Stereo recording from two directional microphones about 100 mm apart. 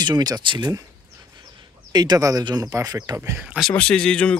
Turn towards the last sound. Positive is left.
turn(degrees=10)  # may be behind; listen again after turning